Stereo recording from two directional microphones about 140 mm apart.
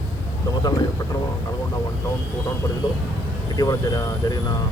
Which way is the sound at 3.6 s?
25° left (ahead or behind).